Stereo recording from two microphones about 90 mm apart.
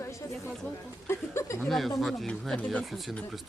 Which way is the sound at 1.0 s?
30° left (ahead or behind).